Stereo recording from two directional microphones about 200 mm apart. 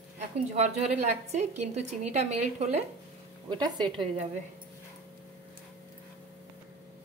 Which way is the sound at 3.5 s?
20° right (ahead or behind).